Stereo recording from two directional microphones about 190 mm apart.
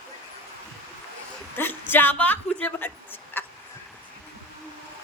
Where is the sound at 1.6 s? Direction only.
10° left (ahead or behind).